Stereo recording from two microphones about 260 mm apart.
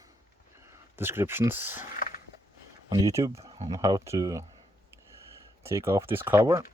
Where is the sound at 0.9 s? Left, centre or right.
Centre.